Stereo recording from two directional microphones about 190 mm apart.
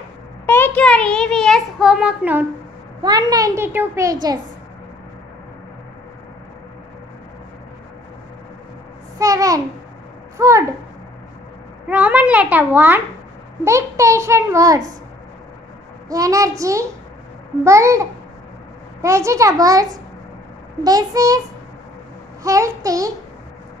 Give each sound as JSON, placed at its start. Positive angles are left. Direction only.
{"t": 0.5, "sound": "a sound", "side_deg": 10}
{"t": 3.0, "sound": "a child's voice", "side_deg": -20}
{"t": 9.2, "sound": "a child's voice", "side_deg": -15}
{"t": 11.9, "sound": "a child's voice", "side_deg": -10}
{"t": 16.1, "sound": "a child's voice", "side_deg": -15}
{"t": 22.4, "sound": "a child's voice", "side_deg": -15}